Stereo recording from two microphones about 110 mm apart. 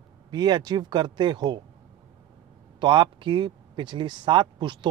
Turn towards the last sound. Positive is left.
turn(degrees=-45)  # may be behind; listen again after turning